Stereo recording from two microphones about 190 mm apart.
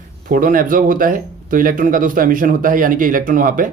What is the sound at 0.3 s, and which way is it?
Speech, 45° right (ahead or behind).